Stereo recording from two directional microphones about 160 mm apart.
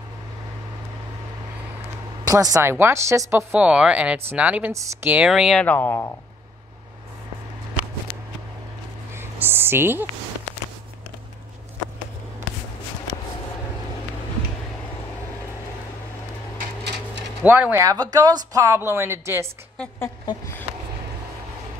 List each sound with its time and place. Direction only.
2.2 s a woman's voice: 20° right (ahead or behind); by 6.0 s 10° left (ahead or behind)
8.1 s a sound: 60° left (ahead or behind)
9.1 s a sound: 15° right (ahead or behind)
17.4 s speech: 10° right (ahead or behind)
17.8 s speech: 25° right (ahead or behind)
20.2 s speech: 15° left (ahead or behind)